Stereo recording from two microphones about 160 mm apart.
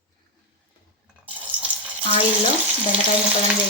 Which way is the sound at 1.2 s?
10° right (ahead or behind).